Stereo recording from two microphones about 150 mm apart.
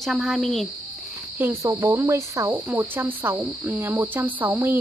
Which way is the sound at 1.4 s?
15° right (ahead or behind).